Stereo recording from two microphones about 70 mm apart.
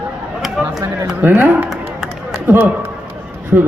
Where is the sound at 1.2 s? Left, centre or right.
Right.